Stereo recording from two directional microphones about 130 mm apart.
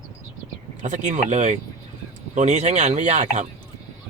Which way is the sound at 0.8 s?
75° right (ahead or behind).